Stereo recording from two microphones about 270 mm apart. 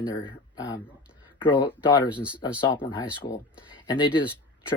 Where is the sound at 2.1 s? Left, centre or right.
Centre.